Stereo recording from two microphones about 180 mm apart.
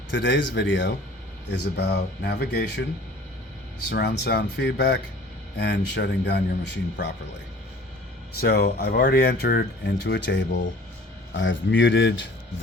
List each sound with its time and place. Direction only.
0.1 s speech: 85° left
1.5 s speech: 70° left (ahead or behind)
3.8 s speech: 70° left (ahead or behind)
8.4 s speech: 60° left (ahead or behind); by 10.6 s 75° left (ahead or behind)
11.3 s speech: 90° left